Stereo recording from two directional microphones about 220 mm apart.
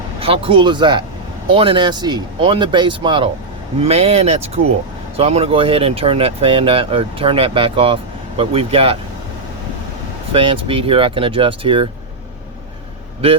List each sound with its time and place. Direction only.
0.2 s speech: 25° right (ahead or behind)
10.3 s speech: 25° right (ahead or behind)